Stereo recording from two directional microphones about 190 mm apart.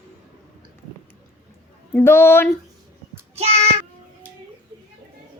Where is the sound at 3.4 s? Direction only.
35° right (ahead or behind).